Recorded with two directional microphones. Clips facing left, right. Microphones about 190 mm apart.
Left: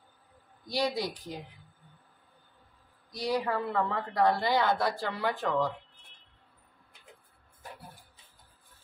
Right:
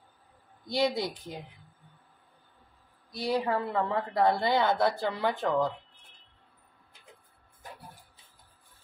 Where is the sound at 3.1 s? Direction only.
25° right (ahead or behind).